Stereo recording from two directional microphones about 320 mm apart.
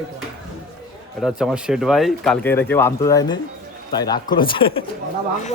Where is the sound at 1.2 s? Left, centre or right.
Centre.